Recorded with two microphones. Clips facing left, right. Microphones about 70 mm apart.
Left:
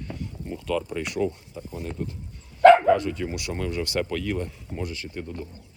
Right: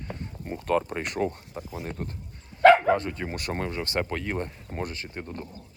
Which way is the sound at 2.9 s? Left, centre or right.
Right.